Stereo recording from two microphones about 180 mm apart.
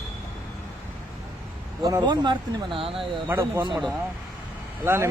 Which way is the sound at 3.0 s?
10° right (ahead or behind).